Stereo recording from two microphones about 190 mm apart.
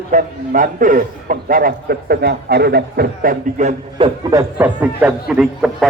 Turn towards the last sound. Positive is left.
turn(degrees=0)  # may be behind; listen again after turning